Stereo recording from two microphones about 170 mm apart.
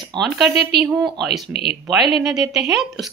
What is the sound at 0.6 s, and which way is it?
Speech, 70° right (ahead or behind).